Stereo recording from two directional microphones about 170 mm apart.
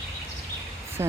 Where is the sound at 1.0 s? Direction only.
15° right (ahead or behind).